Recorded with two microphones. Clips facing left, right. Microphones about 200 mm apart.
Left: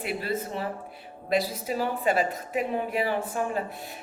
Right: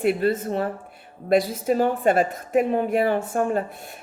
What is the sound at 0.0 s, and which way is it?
A man's voice, 50° right (ahead or behind).